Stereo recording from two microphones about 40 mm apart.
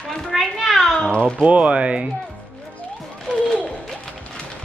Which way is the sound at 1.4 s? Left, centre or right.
Right.